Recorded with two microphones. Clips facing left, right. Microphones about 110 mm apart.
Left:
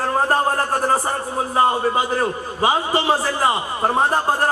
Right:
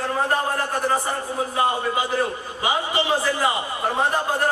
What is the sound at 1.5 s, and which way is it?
A man's voice, 40° left (ahead or behind).